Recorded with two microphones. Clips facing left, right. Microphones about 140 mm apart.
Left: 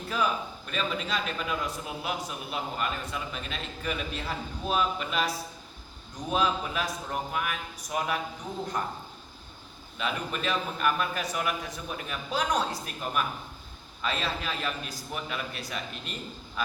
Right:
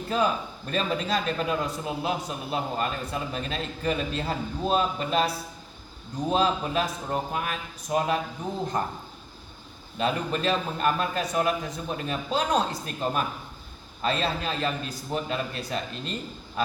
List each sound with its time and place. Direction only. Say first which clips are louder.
0.1 s a man's voice: right 3 dB; 30° right (ahead or behind)
10.0 s a man's voice: right 5 dB; 30° right (ahead or behind)